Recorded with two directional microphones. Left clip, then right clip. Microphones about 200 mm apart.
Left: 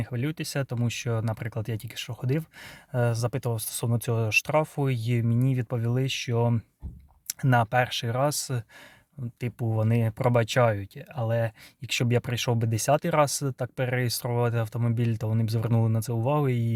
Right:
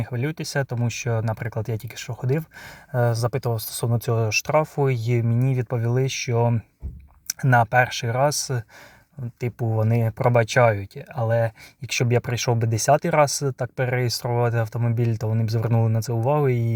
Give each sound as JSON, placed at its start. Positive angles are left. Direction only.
{"t": 0.0, "sound": "speech", "side_deg": 20}